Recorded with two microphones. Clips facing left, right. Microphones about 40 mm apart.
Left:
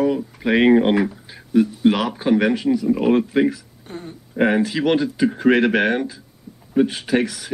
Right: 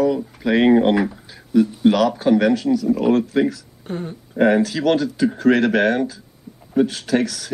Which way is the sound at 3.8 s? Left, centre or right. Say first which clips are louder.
Right 6 dB; right.